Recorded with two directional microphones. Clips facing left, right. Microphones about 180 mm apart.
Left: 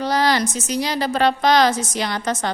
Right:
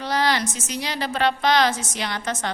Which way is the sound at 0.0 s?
40° left (ahead or behind).